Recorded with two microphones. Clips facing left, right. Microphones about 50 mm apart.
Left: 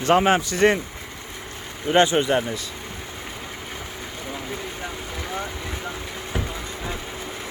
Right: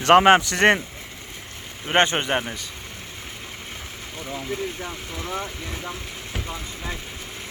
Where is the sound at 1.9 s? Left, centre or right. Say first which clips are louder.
Left 2 dB; right.